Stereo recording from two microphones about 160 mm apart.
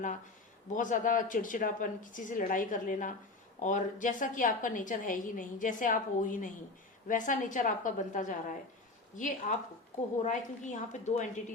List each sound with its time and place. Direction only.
0.7 s a woman's voice: 55° left (ahead or behind)